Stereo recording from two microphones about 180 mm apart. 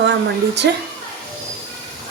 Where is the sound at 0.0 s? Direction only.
70° right (ahead or behind).